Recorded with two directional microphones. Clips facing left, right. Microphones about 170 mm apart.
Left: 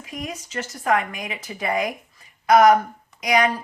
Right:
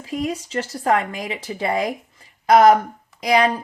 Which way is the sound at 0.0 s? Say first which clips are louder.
Right 8 dB; 30° right (ahead or behind).